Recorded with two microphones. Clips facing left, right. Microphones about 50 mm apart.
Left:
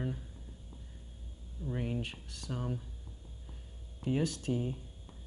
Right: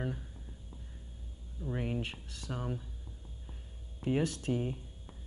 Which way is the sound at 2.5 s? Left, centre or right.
Centre.